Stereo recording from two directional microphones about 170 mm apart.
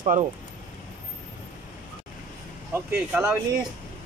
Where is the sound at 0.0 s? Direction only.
45° right (ahead or behind).